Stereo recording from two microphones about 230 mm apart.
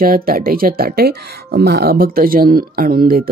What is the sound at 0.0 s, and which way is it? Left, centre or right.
Speech, right.